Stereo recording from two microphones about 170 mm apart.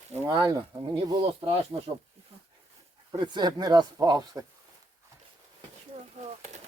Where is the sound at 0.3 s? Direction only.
25° right (ahead or behind).